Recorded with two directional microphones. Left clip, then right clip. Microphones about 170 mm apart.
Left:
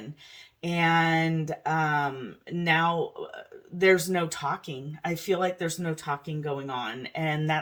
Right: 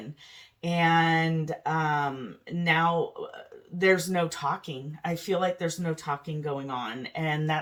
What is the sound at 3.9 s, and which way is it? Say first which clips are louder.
Speech: left 1 dB; 45° left (ahead or behind).